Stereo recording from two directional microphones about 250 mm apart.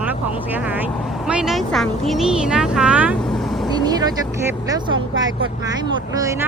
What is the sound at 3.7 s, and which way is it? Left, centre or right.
Speech, centre.